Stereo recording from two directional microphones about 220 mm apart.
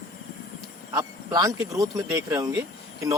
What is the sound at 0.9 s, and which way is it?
Speech, 15° right (ahead or behind).